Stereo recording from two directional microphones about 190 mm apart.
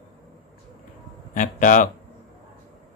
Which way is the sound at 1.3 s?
45° left (ahead or behind).